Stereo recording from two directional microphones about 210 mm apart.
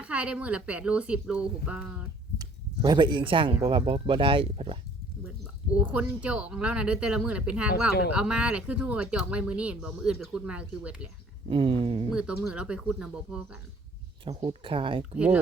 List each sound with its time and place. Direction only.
0.0 s speech: 5° right (ahead or behind)
2.4 s speech: 20° right (ahead or behind)
5.7 s speech: 5° right (ahead or behind)
11.4 s speech: 25° right (ahead or behind)
12.1 s speech: 5° right (ahead or behind)
14.3 s speech: 25° right (ahead or behind)
15.1 s speech: 5° right (ahead or behind)